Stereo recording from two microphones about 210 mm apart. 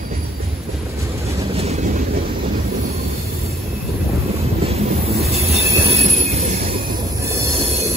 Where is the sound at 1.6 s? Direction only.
30° right (ahead or behind).